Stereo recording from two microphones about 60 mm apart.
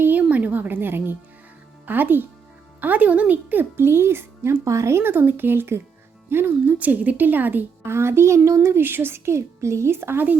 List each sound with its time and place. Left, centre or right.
0.0 s a woman's voice: right
4.6 s speech: right
6.7 s speech: right
7.9 s speech: right